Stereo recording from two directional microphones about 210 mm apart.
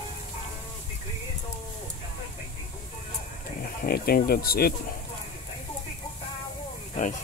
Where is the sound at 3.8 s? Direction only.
45° left (ahead or behind).